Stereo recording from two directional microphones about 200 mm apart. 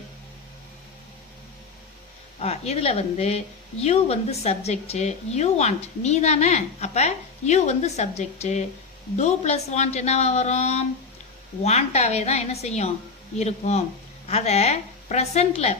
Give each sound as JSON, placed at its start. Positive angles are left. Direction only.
{"t": 2.4, "sound": "a woman's voice", "side_deg": 30}